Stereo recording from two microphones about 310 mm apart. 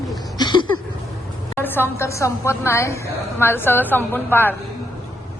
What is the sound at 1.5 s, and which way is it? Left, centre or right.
A woman's voice, centre.